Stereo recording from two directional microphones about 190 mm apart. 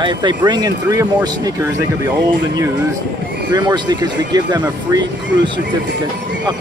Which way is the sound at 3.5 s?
20° right (ahead or behind).